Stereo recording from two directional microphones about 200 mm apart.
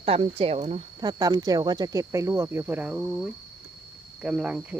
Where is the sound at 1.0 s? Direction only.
20° right (ahead or behind).